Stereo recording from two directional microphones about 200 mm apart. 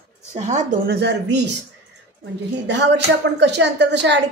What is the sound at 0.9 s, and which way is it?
Speech, 60° right (ahead or behind).